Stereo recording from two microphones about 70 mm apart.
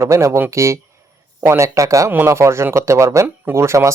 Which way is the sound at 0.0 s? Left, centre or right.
Right.